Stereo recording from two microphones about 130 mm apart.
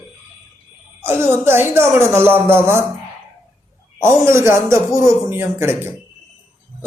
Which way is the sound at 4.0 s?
20° right (ahead or behind).